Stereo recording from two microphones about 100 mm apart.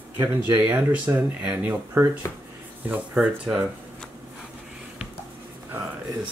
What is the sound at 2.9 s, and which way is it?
Speech, 15° right (ahead or behind).